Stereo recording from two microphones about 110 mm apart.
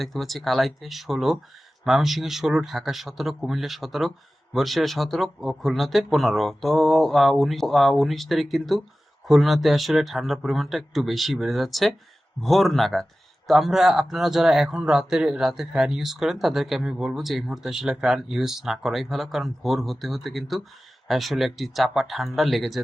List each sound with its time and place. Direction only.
0.0 s speech: centre (ahead or behind)